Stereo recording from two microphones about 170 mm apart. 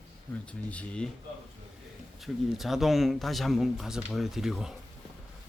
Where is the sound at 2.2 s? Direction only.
Centre (ahead or behind).